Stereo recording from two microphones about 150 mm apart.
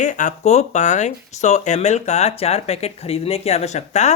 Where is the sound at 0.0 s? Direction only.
55° left (ahead or behind).